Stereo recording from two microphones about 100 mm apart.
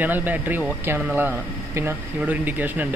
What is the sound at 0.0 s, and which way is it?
Speech, 20° right (ahead or behind).